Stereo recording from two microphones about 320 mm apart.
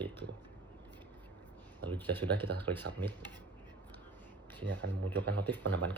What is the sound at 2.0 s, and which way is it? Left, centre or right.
Speech, centre.